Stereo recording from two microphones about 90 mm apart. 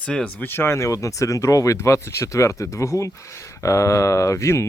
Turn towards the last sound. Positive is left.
turn(degrees=30)  # may be behind; listen again after turning